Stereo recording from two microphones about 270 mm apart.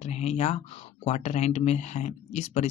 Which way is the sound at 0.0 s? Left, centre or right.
Left.